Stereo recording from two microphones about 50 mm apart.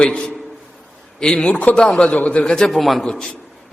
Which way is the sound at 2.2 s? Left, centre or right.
Left.